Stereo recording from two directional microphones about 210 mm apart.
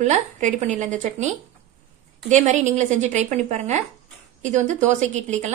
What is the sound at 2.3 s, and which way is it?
A woman's voice, 35° right (ahead or behind).